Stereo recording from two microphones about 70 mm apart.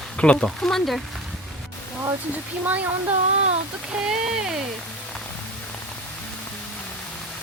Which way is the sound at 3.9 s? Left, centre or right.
Centre.